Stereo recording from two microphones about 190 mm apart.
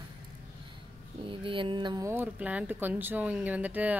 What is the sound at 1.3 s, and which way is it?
Speech, 25° right (ahead or behind).